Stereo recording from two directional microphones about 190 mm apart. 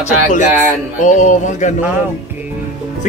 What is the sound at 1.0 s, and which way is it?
Speech, 40° left (ahead or behind).